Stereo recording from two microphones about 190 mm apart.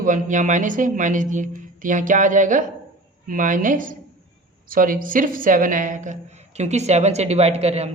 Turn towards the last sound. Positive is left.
turn(degrees=-35)  # may be behind; listen again after turning